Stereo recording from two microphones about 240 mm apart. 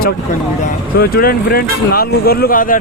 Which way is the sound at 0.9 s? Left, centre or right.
Left.